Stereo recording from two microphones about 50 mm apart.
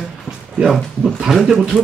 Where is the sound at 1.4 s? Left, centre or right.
Centre.